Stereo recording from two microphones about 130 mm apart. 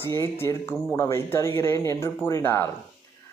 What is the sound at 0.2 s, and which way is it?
Speech, 20° left (ahead or behind).